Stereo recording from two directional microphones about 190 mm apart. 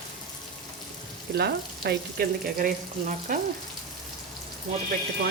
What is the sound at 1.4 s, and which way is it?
Frying, 55° right (ahead or behind).